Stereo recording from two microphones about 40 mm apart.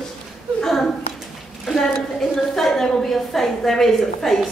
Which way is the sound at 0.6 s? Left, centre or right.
Centre.